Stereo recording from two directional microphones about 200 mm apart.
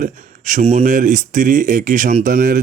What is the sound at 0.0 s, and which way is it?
Speech, 35° right (ahead or behind).